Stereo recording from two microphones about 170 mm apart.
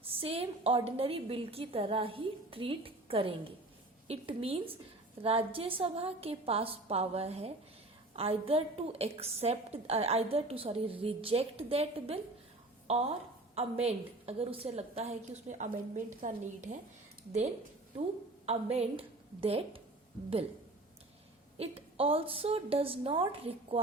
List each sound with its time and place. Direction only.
0.1 s a woman's voice: 35° right (ahead or behind)
18.4 s a woman's voice: 35° right (ahead or behind)
21.6 s a woman's voice: 35° right (ahead or behind)